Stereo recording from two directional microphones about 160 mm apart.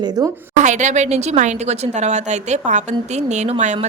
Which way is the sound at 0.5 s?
50° right (ahead or behind).